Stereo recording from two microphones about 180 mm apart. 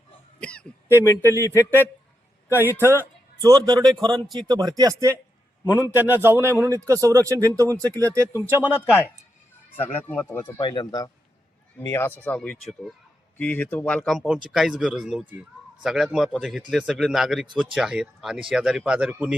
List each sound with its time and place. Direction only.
0.3 s throat clearing: 5° left (ahead or behind)
1.2 s a man's voice: 15° right (ahead or behind)
9.8 s speech: 10° left (ahead or behind)
10.6 s a man's voice: 25° left (ahead or behind); by 19.4 s 5° right (ahead or behind)